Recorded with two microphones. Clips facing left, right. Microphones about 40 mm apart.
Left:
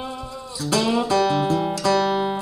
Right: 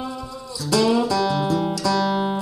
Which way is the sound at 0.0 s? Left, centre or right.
Left.